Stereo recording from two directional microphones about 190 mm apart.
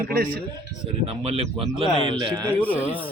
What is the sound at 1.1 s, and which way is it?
A man's voice, 35° right (ahead or behind).